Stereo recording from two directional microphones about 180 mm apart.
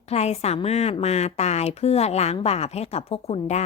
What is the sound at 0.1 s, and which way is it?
A woman's voice, 35° left (ahead or behind).